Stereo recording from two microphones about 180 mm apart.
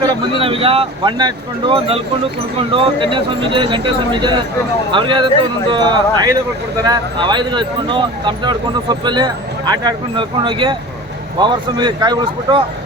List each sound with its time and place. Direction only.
0.3 s speech: 30° right (ahead or behind)